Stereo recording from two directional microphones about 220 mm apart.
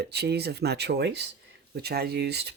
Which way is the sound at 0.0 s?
50° right (ahead or behind).